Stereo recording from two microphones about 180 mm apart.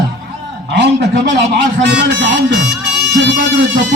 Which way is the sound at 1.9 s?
80° right.